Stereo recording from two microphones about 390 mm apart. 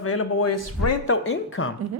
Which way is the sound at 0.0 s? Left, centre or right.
Left.